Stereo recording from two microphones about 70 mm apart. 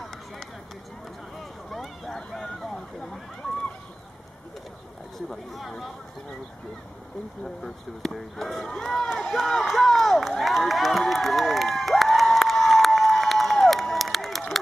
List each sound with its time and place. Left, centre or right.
1.7 s boat: centre
5.6 s speech: centre
7.4 s speech: centre
9.2 s crowd: centre